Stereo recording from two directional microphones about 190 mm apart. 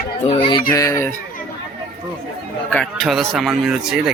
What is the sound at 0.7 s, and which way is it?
Speech, 15° left (ahead or behind).